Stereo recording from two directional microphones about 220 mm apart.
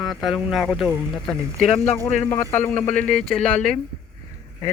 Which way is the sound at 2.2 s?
10° left (ahead or behind).